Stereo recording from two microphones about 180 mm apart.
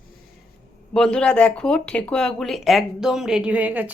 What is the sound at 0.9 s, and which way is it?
Speech, 5° left (ahead or behind).